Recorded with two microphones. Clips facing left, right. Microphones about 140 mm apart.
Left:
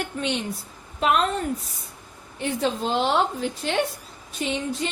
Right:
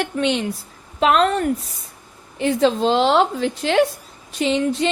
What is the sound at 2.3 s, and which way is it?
A woman's voice, 90° right.